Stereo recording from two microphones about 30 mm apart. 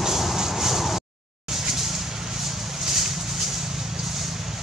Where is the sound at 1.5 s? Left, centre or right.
Centre.